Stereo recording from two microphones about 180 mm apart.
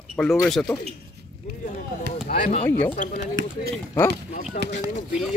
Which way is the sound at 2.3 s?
45° left (ahead or behind).